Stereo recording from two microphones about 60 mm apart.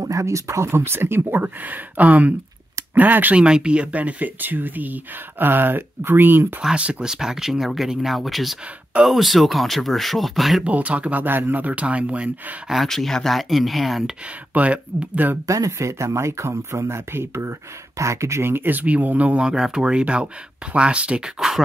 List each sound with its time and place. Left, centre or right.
0.0 s speech: right
3.3 s speech: centre; by 6.4 s right
6.6 s speech: centre
10.6 s speech: right
12.8 s speech: centre
14.5 s speech: right
15.4 s speech: right
18.5 s speech: right
19.4 s speech: centre
21.2 s speech: centre